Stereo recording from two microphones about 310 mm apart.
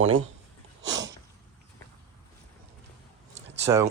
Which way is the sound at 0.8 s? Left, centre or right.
Right.